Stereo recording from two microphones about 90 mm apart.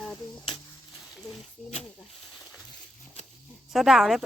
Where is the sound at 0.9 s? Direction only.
5° right (ahead or behind).